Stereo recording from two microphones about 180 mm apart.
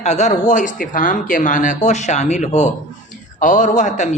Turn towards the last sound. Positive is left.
turn(degrees=40)  # may be behind; listen again after turning